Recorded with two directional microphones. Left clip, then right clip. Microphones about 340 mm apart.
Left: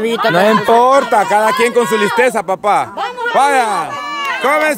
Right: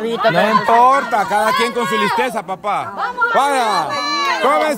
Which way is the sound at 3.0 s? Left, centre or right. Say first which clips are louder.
Right 1 dB; left.